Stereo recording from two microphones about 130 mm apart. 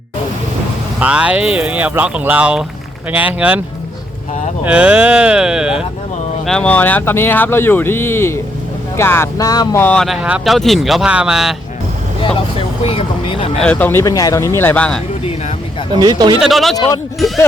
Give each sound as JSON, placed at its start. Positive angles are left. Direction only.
{"t": 0.9, "sound": "speech", "side_deg": -10}
{"t": 4.6, "sound": "speech", "side_deg": -10}
{"t": 6.4, "sound": "speech", "side_deg": 5}
{"t": 9.7, "sound": "speech", "side_deg": 10}
{"t": 10.2, "sound": "speech", "side_deg": -5}
{"t": 12.2, "sound": "speech", "side_deg": 45}
{"t": 13.6, "sound": "speech", "side_deg": 10}
{"t": 14.0, "sound": "speech", "side_deg": 30}
{"t": 16.0, "sound": "speech", "side_deg": -30}
{"t": 16.4, "sound": "speech", "side_deg": 0}
{"t": 16.7, "sound": "speech", "side_deg": 30}